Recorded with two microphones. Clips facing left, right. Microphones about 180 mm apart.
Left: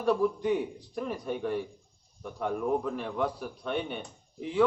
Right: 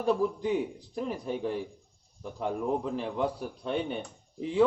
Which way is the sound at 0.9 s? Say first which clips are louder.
Right 1 dB; 25° right (ahead or behind).